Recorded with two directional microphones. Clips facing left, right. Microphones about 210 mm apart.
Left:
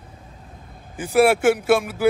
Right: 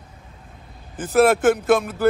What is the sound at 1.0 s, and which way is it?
Speech, 10° left (ahead or behind).